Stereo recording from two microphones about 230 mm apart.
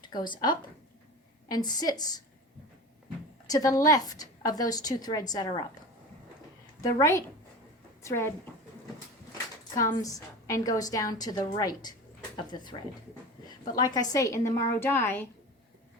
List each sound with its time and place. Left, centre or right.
0.0 s a woman's voice: centre
3.4 s a woman's voice: centre
6.8 s a woman's voice: centre
9.7 s a woman's voice: centre